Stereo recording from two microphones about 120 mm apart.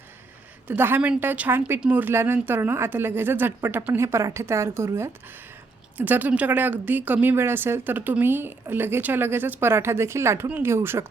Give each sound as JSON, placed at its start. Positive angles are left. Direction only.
{"t": 0.7, "sound": "a woman's voice", "side_deg": -15}